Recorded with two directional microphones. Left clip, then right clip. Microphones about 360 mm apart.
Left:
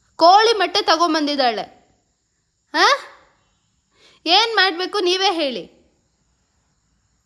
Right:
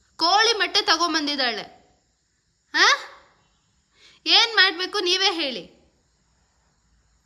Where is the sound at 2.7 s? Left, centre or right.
Centre.